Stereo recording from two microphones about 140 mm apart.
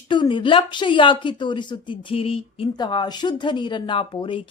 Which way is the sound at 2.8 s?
35° left (ahead or behind).